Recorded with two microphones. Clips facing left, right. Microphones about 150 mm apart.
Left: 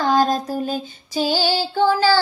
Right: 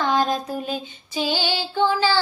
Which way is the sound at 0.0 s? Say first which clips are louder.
Left 3 dB; 40° left (ahead or behind).